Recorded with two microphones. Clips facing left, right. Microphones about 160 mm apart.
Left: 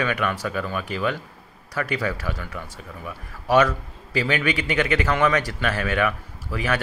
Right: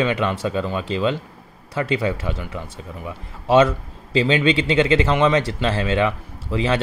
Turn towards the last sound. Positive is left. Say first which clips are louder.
# right 5 dB
turn(degrees=-25)  # may be behind; listen again after turning